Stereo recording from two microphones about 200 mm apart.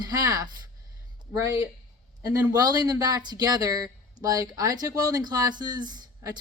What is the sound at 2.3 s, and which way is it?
Speech, 20° right (ahead or behind).